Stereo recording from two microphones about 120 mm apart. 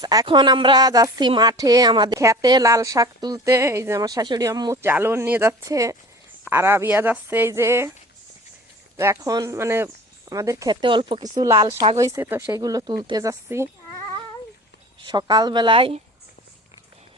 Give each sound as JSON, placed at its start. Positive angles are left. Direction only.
{"t": 0.0, "sound": "a woman's voice", "side_deg": -30}
{"t": 4.8, "sound": "a woman's voice", "side_deg": -20}
{"t": 9.0, "sound": "speech", "side_deg": -25}
{"t": 10.7, "sound": "a woman's voice", "side_deg": -40}
{"t": 12.5, "sound": "speech", "side_deg": -30}
{"t": 15.0, "sound": "speech", "side_deg": -35}